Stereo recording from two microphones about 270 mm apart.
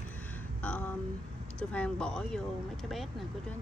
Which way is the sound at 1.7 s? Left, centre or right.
Centre.